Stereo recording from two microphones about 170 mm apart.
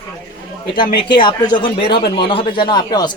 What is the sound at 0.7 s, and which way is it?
Speech, 30° left (ahead or behind).